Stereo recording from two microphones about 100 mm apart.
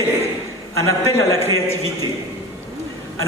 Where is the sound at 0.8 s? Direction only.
30° left (ahead or behind).